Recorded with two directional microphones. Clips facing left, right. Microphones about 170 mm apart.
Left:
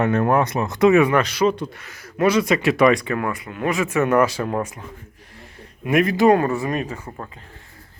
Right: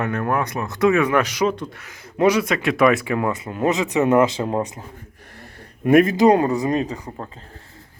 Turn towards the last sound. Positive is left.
turn(degrees=-15)  # may be behind; listen again after turning